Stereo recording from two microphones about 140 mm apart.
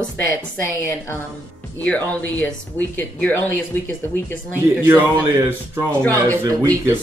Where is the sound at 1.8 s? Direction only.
10° left (ahead or behind).